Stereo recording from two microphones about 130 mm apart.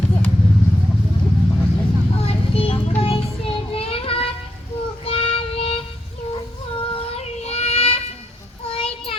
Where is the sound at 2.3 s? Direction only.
45° left (ahead or behind).